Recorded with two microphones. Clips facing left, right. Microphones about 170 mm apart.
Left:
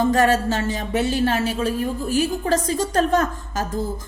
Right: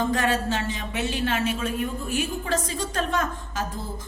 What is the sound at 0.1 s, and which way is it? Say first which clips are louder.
A woman's voice: left 6 dB; 40° left (ahead or behind).